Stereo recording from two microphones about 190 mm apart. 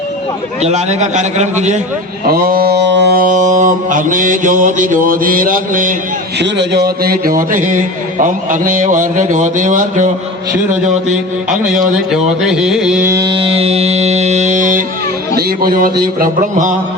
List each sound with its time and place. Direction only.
0.6 s a man's voice: 35° right (ahead or behind)
2.3 s a man's voice: 50° right (ahead or behind)
6.4 s a man's voice: 60° right (ahead or behind); by 10.1 s 40° right (ahead or behind)
10.8 s carnatic music: centre (ahead or behind)
13.1 s music: 20° right (ahead or behind); by 14.8 s 45° right (ahead or behind)
15.4 s a man's voice: 50° right (ahead or behind)